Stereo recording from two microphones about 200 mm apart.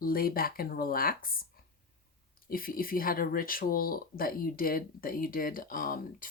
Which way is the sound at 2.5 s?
45° left (ahead or behind).